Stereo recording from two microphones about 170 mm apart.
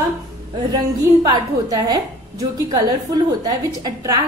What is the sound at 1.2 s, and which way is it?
Speech, 25° right (ahead or behind).